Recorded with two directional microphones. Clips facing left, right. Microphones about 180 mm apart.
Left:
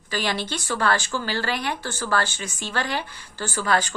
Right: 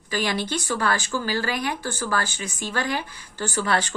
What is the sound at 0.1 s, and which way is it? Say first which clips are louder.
Speech: right 1 dB; 15° right (ahead or behind).